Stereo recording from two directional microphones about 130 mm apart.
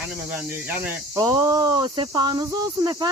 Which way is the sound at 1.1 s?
25° right (ahead or behind).